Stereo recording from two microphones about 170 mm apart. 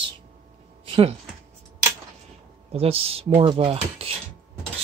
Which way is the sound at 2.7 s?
35° right (ahead or behind).